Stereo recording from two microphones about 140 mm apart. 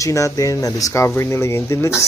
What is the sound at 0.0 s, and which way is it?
Speech, 20° left (ahead or behind).